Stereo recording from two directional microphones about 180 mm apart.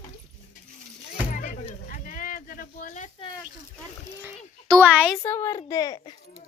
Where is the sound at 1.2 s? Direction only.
45° left (ahead or behind).